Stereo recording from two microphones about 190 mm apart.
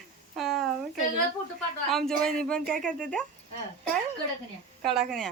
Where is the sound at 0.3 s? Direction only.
Centre (ahead or behind).